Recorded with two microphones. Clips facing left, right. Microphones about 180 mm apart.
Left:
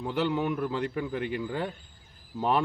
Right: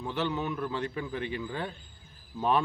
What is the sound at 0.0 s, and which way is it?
A man's voice, 10° left (ahead or behind).